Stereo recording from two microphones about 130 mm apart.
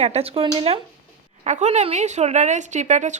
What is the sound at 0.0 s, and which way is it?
Speech, 50° right (ahead or behind).